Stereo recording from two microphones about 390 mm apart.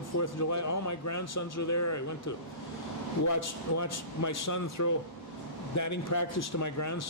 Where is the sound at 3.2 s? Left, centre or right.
Left.